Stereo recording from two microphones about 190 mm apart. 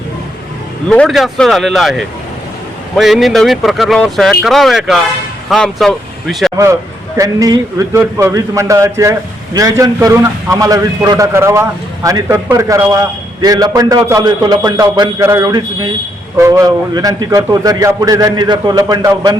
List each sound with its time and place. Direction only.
0.9 s speech: 5° left (ahead or behind)
7.2 s a man's voice: 20° right (ahead or behind)